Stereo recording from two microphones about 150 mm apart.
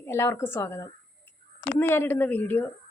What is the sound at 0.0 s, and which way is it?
A woman's voice, 15° left (ahead or behind).